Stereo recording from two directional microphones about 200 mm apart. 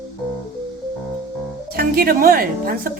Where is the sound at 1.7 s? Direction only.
50° right (ahead or behind).